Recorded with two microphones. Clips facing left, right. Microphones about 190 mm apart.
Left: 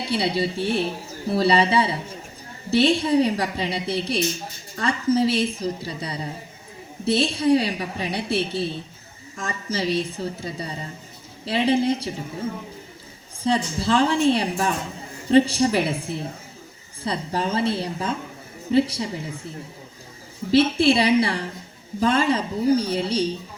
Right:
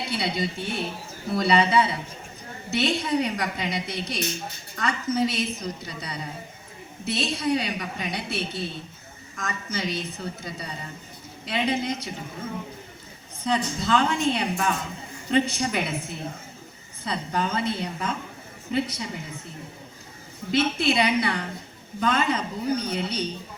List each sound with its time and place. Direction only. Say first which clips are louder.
0.1 s a woman's voice: left 6 dB; 30° left (ahead or behind)
13.4 s a woman's voice: left 3 dB; 30° left (ahead or behind)
20.5 s a woman's voice: left 6 dB; 30° left (ahead or behind)